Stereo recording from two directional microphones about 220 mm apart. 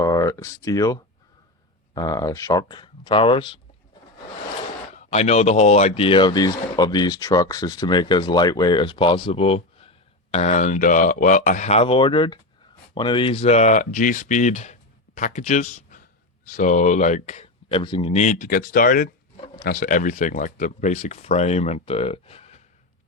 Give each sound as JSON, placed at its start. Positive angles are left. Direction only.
{"t": 0.0, "sound": "speech", "side_deg": 15}
{"t": 2.0, "sound": "speech", "side_deg": 15}
{"t": 5.1, "sound": "speech", "side_deg": 30}